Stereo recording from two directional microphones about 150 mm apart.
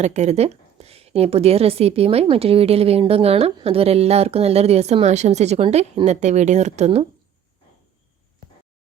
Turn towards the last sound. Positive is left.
turn(degrees=-50)  # may be behind; listen again after turning